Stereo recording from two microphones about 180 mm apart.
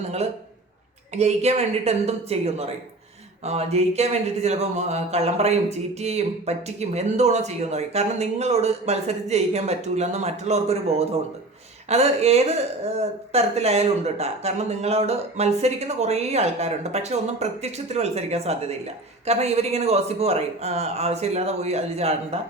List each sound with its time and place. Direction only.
1.1 s speech: 40° right (ahead or behind)